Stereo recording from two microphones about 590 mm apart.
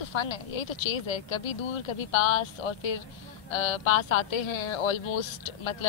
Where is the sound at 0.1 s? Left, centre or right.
Left.